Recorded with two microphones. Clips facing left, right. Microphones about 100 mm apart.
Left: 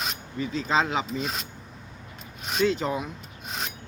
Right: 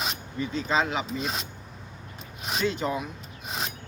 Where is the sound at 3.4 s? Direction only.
Centre (ahead or behind).